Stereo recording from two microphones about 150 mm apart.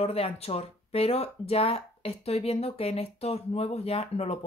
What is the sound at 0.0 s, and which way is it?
Speech, 40° left (ahead or behind).